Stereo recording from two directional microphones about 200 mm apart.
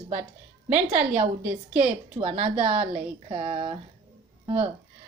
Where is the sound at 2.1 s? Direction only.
30° right (ahead or behind).